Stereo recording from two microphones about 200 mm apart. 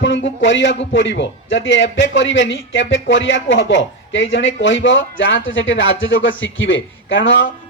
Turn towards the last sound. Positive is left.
turn(degrees=70)  # may be behind; listen again after turning